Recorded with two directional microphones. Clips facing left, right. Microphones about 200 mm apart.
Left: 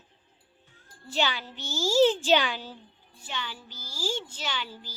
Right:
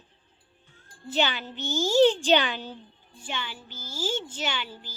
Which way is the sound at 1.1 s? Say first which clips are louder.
Right 2 dB; centre (ahead or behind).